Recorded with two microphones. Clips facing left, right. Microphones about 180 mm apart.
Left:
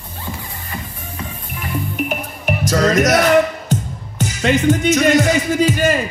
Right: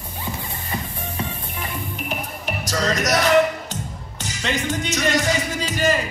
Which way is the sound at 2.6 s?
55° left (ahead or behind).